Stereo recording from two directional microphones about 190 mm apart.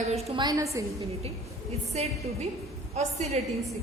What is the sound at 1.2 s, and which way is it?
A woman's voice, 35° right (ahead or behind).